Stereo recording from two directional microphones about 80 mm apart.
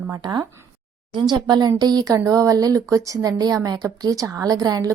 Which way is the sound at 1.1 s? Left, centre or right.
Right.